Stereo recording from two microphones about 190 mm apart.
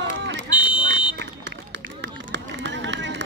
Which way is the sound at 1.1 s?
65° right (ahead or behind).